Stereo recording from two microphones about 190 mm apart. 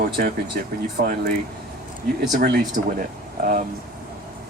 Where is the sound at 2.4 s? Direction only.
60° right (ahead or behind).